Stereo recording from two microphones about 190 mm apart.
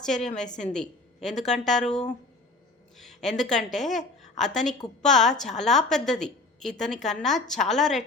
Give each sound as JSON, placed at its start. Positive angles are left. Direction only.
{"t": 0.0, "sound": "a woman's voice", "side_deg": 5}